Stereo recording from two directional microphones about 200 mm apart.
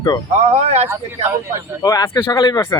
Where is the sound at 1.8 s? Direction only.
15° left (ahead or behind).